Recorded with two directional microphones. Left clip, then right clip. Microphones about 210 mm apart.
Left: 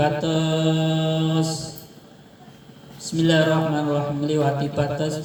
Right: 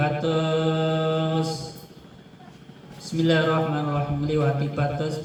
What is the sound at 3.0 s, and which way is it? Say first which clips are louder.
Speech: left 3 dB; 50° left (ahead or behind).